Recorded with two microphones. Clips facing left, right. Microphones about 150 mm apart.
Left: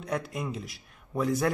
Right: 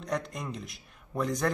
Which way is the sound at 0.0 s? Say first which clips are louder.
Left 1 dB; 5° left (ahead or behind).